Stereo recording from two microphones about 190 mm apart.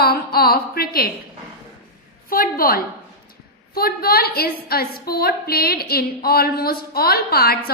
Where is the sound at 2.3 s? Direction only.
50° left (ahead or behind).